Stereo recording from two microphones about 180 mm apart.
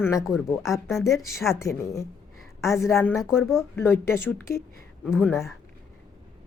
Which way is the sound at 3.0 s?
10° left (ahead or behind).